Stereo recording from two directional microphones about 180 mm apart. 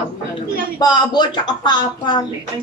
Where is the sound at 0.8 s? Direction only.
25° left (ahead or behind).